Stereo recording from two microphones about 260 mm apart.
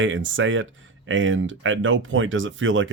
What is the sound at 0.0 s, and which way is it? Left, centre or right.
Speech, right.